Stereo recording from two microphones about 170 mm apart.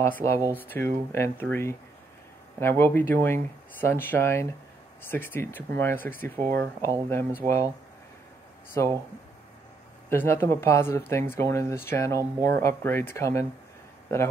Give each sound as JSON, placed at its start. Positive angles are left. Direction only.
{"t": 0.0, "sound": "speech", "side_deg": 15}
{"t": 8.8, "sound": "speech", "side_deg": 15}
{"t": 10.0, "sound": "speech", "side_deg": 15}